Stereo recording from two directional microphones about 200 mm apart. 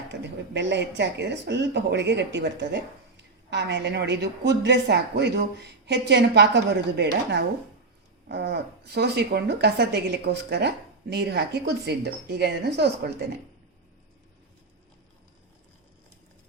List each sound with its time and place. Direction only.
0.1 s speech: 60° right (ahead or behind)